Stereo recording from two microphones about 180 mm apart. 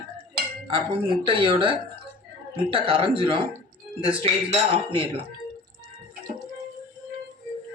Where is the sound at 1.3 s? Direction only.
30° right (ahead or behind).